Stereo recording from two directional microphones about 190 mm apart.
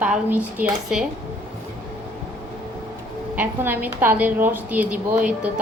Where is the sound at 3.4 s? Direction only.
10° right (ahead or behind).